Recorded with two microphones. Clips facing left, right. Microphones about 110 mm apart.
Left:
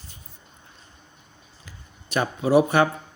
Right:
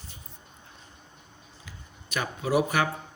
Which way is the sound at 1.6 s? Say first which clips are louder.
Left 1 dB; 35° left (ahead or behind).